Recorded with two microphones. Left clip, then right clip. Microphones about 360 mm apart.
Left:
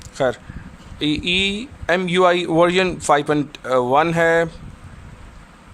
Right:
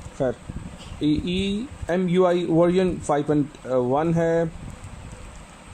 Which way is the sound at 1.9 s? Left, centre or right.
Left.